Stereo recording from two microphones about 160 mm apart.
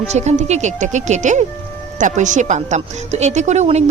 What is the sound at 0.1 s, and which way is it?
Speech, 45° right (ahead or behind).